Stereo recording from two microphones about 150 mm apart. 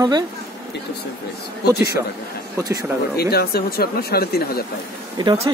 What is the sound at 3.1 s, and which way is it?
Speech, 90° left.